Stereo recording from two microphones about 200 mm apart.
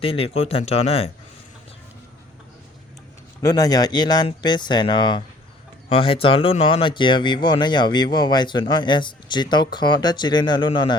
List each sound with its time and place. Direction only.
0.0 s speech: 30° left (ahead or behind)
3.4 s speech: 20° left (ahead or behind)